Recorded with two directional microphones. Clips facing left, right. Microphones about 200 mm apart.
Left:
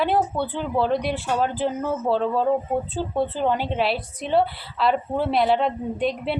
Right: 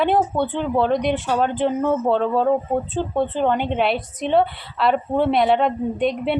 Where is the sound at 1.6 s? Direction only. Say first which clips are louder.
Right 5 dB; 65° right (ahead or behind).